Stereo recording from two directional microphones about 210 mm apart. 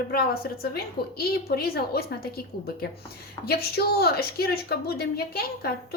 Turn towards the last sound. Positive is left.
turn(degrees=50)  # may be behind; listen again after turning